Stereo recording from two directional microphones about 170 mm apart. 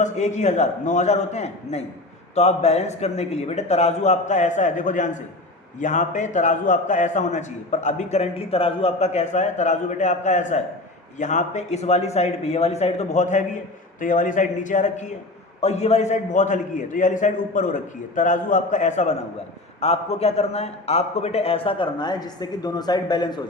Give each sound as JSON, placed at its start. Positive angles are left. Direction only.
{"t": 0.0, "sound": "a man's voice", "side_deg": 45}